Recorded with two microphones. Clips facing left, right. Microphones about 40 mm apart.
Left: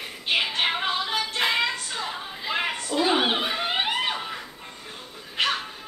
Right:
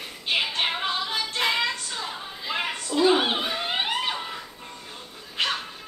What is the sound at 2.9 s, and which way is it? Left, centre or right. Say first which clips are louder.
Chuckle: right 2 dB; centre.